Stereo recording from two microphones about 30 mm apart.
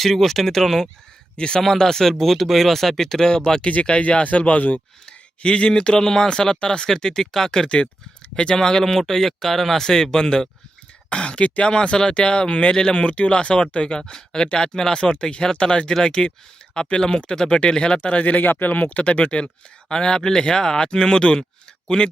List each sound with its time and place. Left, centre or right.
0.0 s speech: centre
1.4 s speech: left
1.6 s speech: centre
4.2 s speech: left
6.0 s speech: centre
11.1 s speech: left
14.0 s speech: centre
18.1 s speech: left
18.3 s speech: left
18.8 s speech: left
19.0 s speech: left
19.9 s speech: left